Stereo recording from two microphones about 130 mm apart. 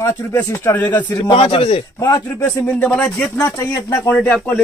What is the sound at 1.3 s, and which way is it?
Speech, 45° left (ahead or behind).